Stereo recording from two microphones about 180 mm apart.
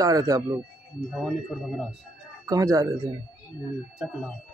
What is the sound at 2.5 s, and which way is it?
Speech, 20° right (ahead or behind).